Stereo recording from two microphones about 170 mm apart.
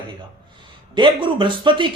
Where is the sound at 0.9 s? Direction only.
30° right (ahead or behind).